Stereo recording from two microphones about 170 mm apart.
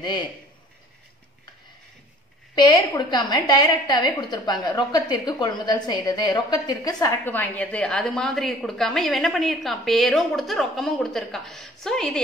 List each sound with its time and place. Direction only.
0.0 s a man's voice: 25° left (ahead or behind)
2.5 s a woman's voice: 20° left (ahead or behind); by 12.2 s 5° left (ahead or behind)